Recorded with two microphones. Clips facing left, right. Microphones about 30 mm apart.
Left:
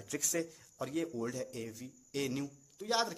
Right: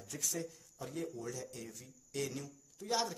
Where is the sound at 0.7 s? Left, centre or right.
Left.